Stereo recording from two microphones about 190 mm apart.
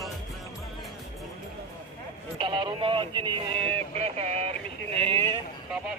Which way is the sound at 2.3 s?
25° right (ahead or behind).